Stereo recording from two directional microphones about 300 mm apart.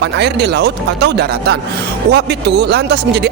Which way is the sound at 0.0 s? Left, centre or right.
Right.